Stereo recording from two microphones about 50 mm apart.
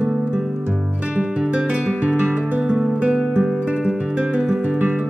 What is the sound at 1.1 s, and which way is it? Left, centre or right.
Music, centre.